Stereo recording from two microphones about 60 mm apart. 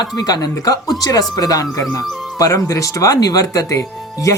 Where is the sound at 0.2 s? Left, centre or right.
Left.